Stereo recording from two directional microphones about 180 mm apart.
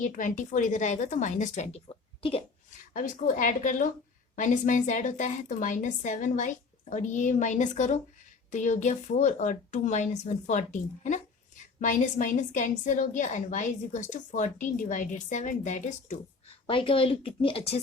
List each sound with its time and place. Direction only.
0.0 s a woman's voice: 45° left (ahead or behind)
16.6 s speech: 30° left (ahead or behind)